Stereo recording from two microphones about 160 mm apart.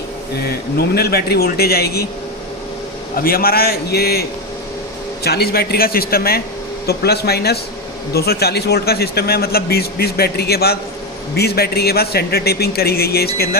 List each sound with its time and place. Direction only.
0.4 s speech: 80° left
3.2 s speech: 65° left (ahead or behind)
6.8 s a man's voice: 90° left